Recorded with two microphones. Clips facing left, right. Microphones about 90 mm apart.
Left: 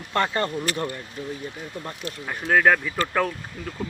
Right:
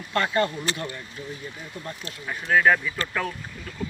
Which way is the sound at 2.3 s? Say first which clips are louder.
Left 1 dB; 45° left (ahead or behind).